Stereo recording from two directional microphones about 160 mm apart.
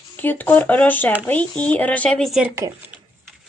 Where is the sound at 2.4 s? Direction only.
15° right (ahead or behind).